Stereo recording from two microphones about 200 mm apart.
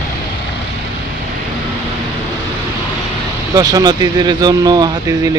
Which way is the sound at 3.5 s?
20° right (ahead or behind).